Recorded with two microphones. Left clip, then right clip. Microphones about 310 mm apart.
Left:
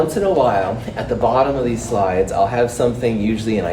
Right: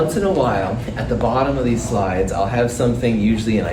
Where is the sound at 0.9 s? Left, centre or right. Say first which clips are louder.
Left 3 dB; left.